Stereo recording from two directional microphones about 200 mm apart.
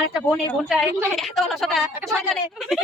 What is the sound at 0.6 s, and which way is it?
Speech, centre (ahead or behind).